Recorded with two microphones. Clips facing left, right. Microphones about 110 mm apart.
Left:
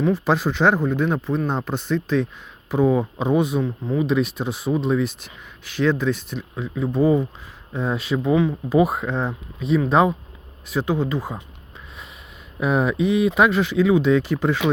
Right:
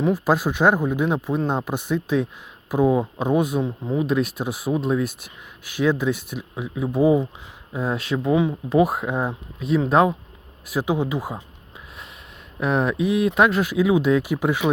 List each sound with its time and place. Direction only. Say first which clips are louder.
0.1 s speech: even; 5° right (ahead or behind)
3.6 s speech: left 1 dB; 15° right (ahead or behind)
4.0 s speech: left 2 dB; centre (ahead or behind)
12.5 s speech: left 1 dB; centre (ahead or behind)